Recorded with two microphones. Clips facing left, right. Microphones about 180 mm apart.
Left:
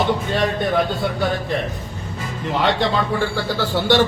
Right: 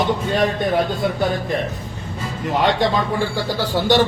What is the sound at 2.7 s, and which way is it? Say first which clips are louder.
Speech: right 1 dB; 15° right (ahead or behind).